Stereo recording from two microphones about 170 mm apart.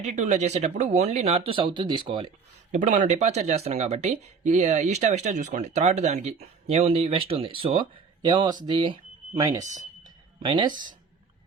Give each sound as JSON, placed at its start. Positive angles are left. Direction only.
{"t": 0.0, "sound": "speech", "side_deg": -45}
{"t": 2.7, "sound": "speech", "side_deg": -45}
{"t": 10.0, "sound": "a sound", "side_deg": -25}